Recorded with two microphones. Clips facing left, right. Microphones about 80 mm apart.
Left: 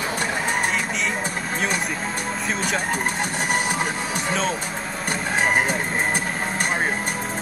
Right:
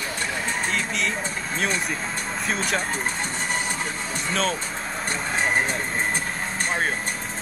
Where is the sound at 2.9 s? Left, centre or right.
Left.